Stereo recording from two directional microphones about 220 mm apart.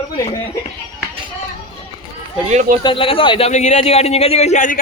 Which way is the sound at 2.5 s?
35° right (ahead or behind).